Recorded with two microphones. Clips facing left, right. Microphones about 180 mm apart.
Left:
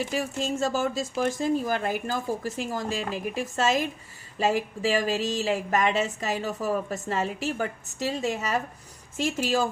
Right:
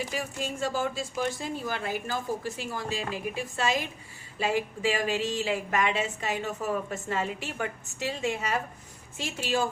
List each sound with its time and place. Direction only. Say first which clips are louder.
0.1 s a woman's voice: left 5 dB; 40° left (ahead or behind)